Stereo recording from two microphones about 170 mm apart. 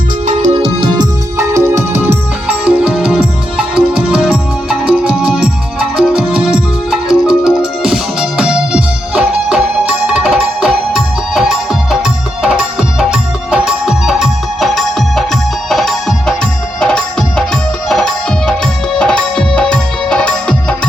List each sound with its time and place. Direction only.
0.5 s music: 30° right (ahead or behind); by 20.7 s 5° left (ahead or behind)